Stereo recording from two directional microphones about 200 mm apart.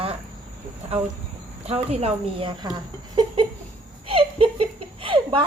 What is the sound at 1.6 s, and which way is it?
Speech, 30° right (ahead or behind).